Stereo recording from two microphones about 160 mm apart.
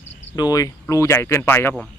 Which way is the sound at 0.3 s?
25° left (ahead or behind).